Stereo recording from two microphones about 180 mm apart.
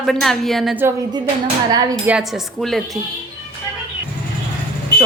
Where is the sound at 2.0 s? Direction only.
5° right (ahead or behind).